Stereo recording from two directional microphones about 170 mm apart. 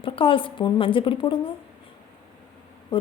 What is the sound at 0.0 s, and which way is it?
Speech, 30° left (ahead or behind).